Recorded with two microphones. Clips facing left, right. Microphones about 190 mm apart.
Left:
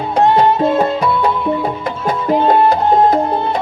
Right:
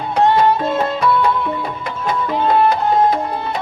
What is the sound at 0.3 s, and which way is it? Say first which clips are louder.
Music: left 3 dB; 35° left (ahead or behind).